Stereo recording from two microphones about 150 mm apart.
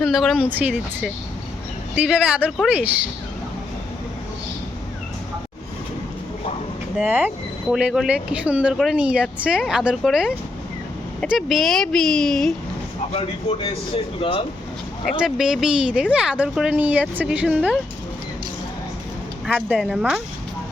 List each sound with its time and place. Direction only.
0.0 s speech: centre (ahead or behind)
0.5 s speech: 10° right (ahead or behind)
7.0 s speech: 10° right (ahead or behind)
13.1 s speech: 40° left (ahead or behind)
15.0 s speech: 5° right (ahead or behind)
19.5 s speech: 10° right (ahead or behind)